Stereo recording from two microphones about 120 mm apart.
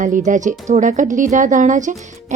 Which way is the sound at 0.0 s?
90° right.